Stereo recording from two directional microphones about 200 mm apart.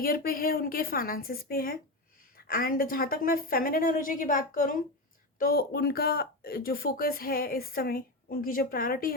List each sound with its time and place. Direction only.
0.0 s speech: 45° left (ahead or behind)